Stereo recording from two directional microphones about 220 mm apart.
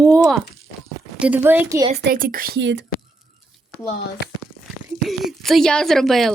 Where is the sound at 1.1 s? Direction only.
5° right (ahead or behind).